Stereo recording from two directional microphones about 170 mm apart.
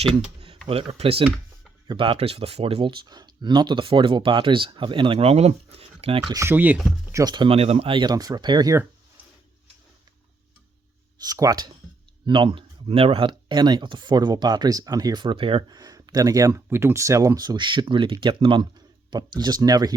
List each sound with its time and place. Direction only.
0.7 s speech: 35° right (ahead or behind)
6.3 s speech: 15° right (ahead or behind)
7.1 s speech: 20° right (ahead or behind)
11.2 s speech: 20° right (ahead or behind)